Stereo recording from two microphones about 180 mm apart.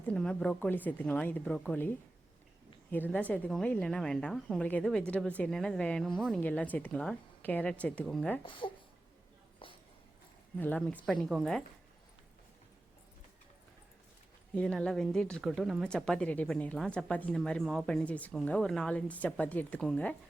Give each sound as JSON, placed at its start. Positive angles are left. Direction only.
{"t": 0.1, "sound": "speech", "side_deg": 5}
{"t": 8.4, "sound": "speech", "side_deg": 25}
{"t": 10.6, "sound": "speech", "side_deg": 5}
{"t": 14.5, "sound": "speech", "side_deg": 5}